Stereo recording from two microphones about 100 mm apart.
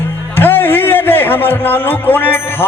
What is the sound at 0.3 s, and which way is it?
A man's voice, 20° left (ahead or behind).